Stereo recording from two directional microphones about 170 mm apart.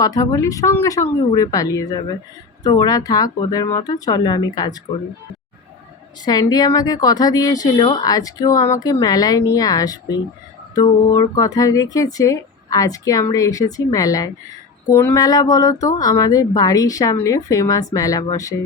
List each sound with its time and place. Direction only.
0.0 s speech: 20° left (ahead or behind)
6.2 s speech: 25° left (ahead or behind)